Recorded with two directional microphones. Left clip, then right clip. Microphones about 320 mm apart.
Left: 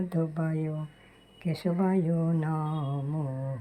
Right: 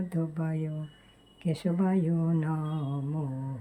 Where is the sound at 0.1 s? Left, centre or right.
Centre.